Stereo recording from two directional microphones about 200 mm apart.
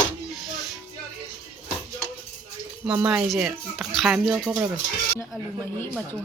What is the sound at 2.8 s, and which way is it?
Speech, 5° right (ahead or behind).